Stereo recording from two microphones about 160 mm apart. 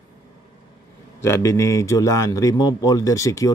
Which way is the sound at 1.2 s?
20° left (ahead or behind).